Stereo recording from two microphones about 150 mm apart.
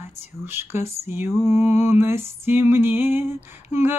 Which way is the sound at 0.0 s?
15° right (ahead or behind).